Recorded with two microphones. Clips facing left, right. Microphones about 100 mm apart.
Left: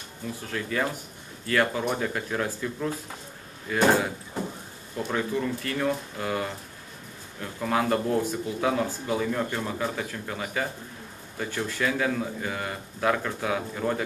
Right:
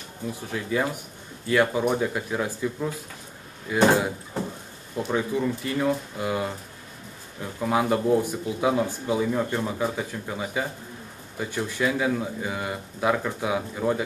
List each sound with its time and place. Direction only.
0.5 s speech: 15° right (ahead or behind)
4.9 s speech: 10° right (ahead or behind)
7.6 s speech: 15° right (ahead or behind)